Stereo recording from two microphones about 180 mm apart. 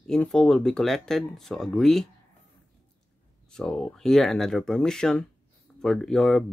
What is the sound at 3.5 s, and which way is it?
Speech, 5° left (ahead or behind).